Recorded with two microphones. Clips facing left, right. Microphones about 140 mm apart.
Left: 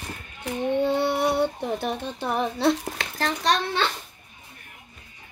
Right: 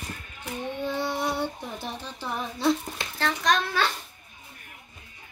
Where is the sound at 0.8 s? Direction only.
65° left (ahead or behind).